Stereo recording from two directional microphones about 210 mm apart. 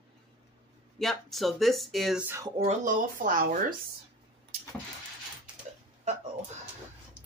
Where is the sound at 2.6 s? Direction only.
35° right (ahead or behind).